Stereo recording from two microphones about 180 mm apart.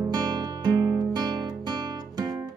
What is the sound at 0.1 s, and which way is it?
Music, 20° right (ahead or behind).